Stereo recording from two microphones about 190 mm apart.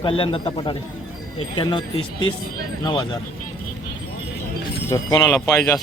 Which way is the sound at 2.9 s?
20° left (ahead or behind).